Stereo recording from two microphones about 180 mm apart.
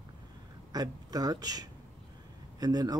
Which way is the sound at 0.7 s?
20° right (ahead or behind).